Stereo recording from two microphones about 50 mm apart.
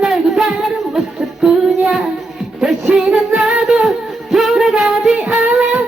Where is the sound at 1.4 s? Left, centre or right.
Centre.